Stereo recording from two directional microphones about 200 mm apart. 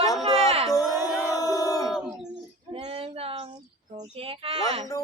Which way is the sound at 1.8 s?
Centre (ahead or behind).